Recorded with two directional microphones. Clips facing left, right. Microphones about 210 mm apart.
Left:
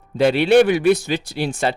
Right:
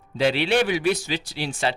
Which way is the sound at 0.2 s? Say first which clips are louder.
Left 7 dB; 50° left (ahead or behind).